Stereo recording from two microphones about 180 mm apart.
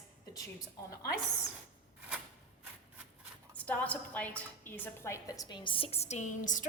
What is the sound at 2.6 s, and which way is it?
Rub, 10° right (ahead or behind).